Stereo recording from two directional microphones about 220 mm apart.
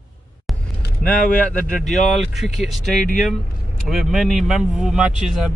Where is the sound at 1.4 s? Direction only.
5° left (ahead or behind).